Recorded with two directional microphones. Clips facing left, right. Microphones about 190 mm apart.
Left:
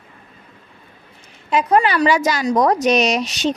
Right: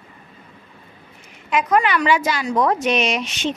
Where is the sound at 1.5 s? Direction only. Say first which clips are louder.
Left 2 dB; 30° left (ahead or behind).